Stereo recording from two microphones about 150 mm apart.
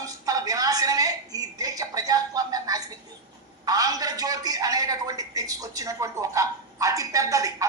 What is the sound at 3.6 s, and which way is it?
A woman's voice, 25° right (ahead or behind).